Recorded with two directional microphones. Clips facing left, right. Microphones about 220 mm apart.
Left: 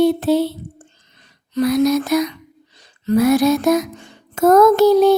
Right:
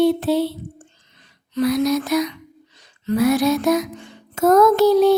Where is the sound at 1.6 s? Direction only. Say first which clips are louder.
Left 3 dB; 45° left (ahead or behind).